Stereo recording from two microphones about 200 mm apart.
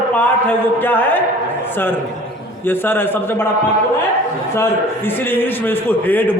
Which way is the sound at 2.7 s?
10° left (ahead or behind).